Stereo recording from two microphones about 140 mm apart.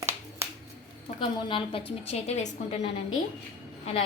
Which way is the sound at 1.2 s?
40° left (ahead or behind).